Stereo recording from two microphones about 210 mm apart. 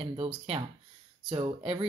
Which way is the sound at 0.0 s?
30° right (ahead or behind).